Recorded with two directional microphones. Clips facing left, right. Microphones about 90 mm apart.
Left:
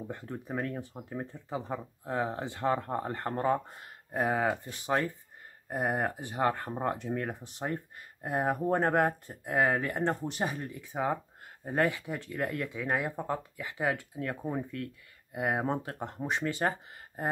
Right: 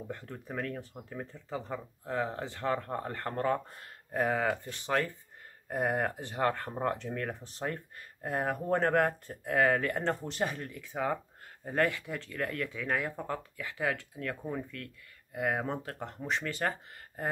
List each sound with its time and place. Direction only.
0.1 s speech: 20° left (ahead or behind)